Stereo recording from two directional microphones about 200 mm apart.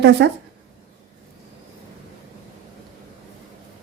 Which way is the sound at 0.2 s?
60° right (ahead or behind).